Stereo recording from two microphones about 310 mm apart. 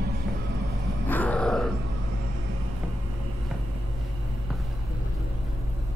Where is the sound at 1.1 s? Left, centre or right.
Centre.